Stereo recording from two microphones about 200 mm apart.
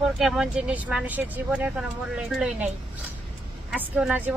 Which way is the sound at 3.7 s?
10° right (ahead or behind).